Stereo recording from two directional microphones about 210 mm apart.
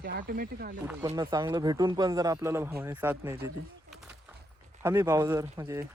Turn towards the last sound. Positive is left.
turn(degrees=-15)  # may be behind; listen again after turning